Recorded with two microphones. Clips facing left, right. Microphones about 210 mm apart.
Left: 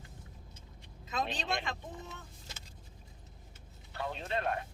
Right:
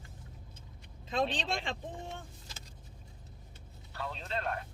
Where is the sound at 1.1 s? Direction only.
30° right (ahead or behind).